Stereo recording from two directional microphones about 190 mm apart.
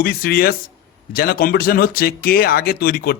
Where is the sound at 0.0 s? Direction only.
55° left (ahead or behind).